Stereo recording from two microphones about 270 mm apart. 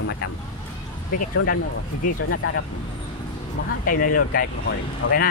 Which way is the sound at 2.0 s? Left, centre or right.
Left.